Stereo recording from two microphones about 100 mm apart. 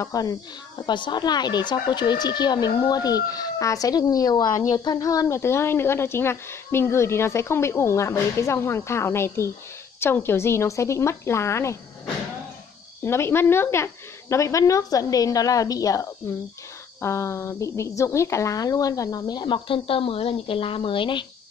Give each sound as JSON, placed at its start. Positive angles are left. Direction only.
{"t": 0.0, "sound": "speech", "side_deg": 40}
{"t": 0.8, "sound": "speech", "side_deg": 50}
{"t": 13.0, "sound": "speech", "side_deg": 25}